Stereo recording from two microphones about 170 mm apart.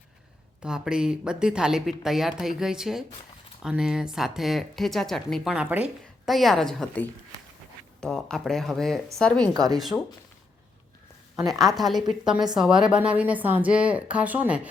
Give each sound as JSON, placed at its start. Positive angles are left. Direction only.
{"t": 0.6, "sound": "speech", "side_deg": -5}
{"t": 11.3, "sound": "a woman's voice", "side_deg": 0}